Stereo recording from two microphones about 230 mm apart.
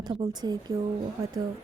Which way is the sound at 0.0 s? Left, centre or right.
Centre.